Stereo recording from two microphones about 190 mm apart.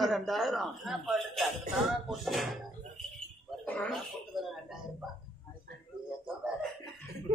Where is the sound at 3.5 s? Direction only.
5° left (ahead or behind).